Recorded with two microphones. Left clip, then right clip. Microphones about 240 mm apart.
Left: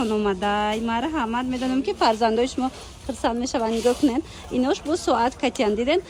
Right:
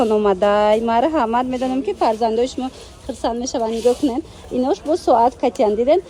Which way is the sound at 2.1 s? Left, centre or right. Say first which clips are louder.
Right 3 dB; centre.